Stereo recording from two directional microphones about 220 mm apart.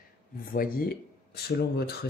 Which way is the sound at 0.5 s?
40° left (ahead or behind).